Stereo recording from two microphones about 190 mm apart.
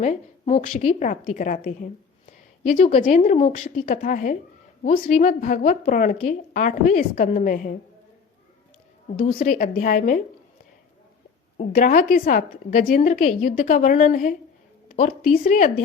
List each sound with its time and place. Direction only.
0.0 s a woman's voice: 40° left (ahead or behind)
9.2 s a woman's voice: 45° left (ahead or behind)
11.5 s a woman's voice: 50° left (ahead or behind)
14.8 s a sound: 40° left (ahead or behind)
15.4 s a woman's voice: 45° left (ahead or behind)